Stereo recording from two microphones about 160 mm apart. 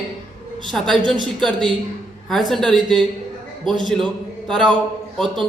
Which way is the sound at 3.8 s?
Centre (ahead or behind).